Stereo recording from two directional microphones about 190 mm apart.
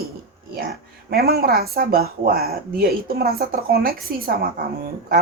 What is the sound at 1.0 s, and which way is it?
Speech, 55° right (ahead or behind).